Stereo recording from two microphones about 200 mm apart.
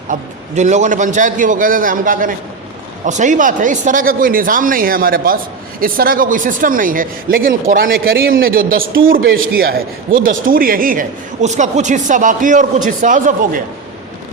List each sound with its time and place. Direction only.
0.1 s a man's voice: 35° right (ahead or behind)